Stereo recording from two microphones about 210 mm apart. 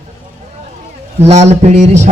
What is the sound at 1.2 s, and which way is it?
Speech, 30° right (ahead or behind).